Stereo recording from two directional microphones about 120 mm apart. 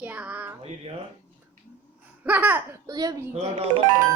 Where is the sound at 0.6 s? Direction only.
55° right (ahead or behind).